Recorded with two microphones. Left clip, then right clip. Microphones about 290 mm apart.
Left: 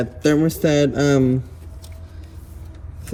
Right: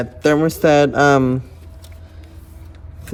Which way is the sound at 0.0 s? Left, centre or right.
Right.